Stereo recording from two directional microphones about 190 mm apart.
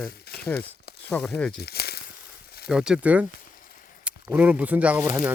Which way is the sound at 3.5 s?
45° left (ahead or behind).